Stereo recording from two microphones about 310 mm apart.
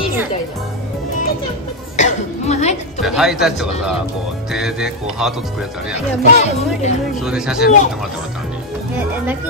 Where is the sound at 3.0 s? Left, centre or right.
Centre.